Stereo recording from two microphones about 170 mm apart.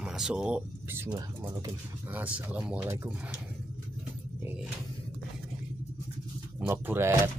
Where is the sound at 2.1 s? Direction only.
10° right (ahead or behind).